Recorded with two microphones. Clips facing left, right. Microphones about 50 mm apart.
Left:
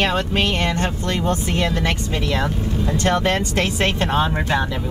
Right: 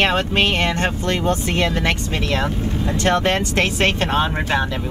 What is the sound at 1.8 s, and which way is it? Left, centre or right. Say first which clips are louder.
Speech: right 1 dB; right.